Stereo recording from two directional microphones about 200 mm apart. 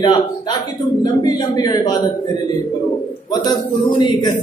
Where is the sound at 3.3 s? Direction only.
20° left (ahead or behind).